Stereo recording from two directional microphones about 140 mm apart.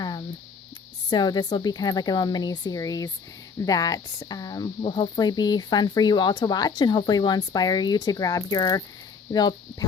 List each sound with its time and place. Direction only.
1.1 s speech: 30° left (ahead or behind)